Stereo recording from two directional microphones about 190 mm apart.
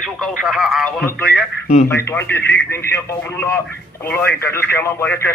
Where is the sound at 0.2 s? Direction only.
Centre (ahead or behind).